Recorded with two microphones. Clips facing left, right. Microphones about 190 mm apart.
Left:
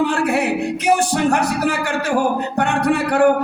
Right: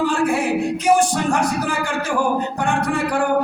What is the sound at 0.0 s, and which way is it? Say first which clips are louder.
Music: left 1 dB; 65° left (ahead or behind).